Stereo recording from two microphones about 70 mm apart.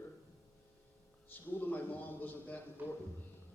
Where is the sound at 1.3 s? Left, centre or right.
Left.